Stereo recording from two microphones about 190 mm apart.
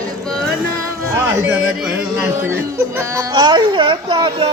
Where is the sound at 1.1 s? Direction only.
15° right (ahead or behind).